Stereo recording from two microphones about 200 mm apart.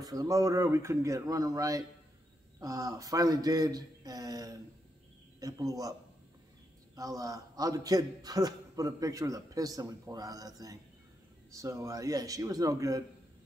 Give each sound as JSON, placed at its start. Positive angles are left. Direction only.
{"t": 0.0, "sound": "a man's voice", "side_deg": -20}
{"t": 7.0, "sound": "a man's voice", "side_deg": -15}